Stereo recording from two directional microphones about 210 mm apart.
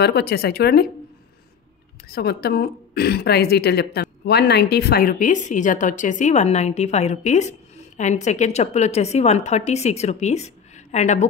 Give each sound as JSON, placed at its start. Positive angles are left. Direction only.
{"t": 0.0, "sound": "a woman's voice", "side_deg": 50}
{"t": 2.0, "sound": "a woman's voice", "side_deg": 50}